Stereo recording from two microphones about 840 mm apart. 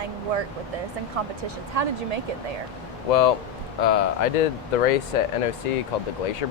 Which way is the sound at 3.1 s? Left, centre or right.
Left.